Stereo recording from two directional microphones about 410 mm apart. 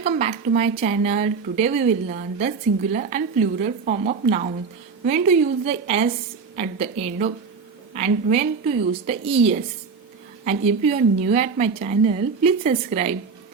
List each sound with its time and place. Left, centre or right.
0.0 s a woman's voice: centre